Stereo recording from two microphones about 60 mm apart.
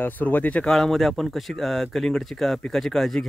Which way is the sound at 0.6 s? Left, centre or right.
Centre.